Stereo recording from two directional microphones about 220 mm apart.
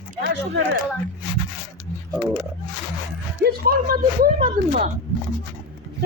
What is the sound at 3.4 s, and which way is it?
Speech, 45° right (ahead or behind).